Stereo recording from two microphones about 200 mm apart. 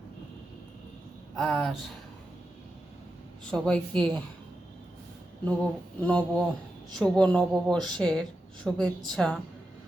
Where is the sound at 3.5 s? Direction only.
5° left (ahead or behind).